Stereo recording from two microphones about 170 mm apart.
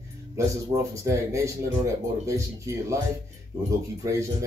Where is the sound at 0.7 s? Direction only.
20° right (ahead or behind).